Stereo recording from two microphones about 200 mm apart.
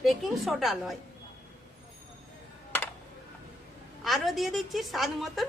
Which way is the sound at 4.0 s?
Centre (ahead or behind).